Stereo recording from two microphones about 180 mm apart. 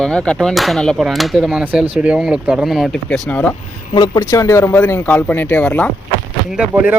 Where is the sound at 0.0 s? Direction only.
5° left (ahead or behind).